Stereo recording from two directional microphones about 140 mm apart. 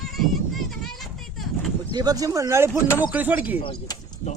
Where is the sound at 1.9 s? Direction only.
25° right (ahead or behind).